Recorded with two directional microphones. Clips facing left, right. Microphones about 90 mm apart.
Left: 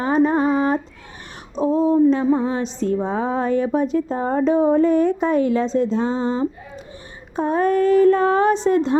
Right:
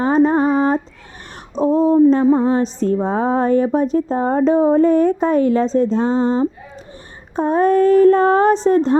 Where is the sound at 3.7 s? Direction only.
35° right (ahead or behind).